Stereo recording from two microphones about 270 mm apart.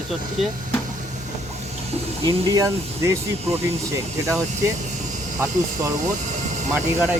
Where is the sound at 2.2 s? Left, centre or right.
Centre.